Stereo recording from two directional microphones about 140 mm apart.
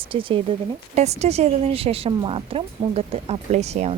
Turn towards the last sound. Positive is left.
turn(degrees=-50)  # may be behind; listen again after turning